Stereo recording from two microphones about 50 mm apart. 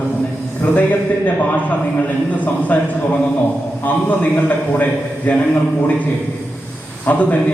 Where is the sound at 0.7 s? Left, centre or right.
Left.